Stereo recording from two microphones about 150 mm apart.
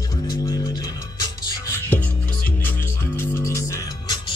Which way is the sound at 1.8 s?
10° left (ahead or behind).